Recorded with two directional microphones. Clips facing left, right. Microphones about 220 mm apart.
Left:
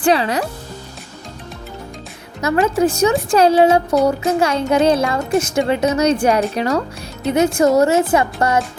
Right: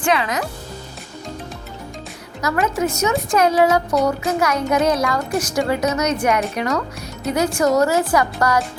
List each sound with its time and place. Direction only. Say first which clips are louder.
0.0 s speech: left 4 dB; 35° left (ahead or behind)
2.4 s speech: left 5 dB; 30° left (ahead or behind)